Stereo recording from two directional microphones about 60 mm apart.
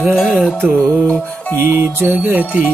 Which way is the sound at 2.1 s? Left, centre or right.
Right.